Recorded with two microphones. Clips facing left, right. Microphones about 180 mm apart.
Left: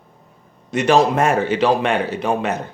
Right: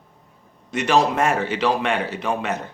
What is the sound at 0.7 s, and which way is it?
Speech, 40° left (ahead or behind).